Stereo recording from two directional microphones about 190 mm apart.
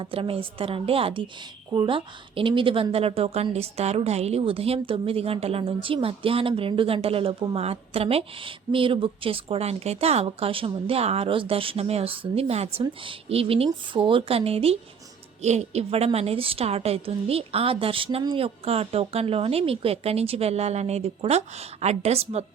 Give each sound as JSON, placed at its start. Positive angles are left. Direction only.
{"t": 0.0, "sound": "a woman's voice", "side_deg": -30}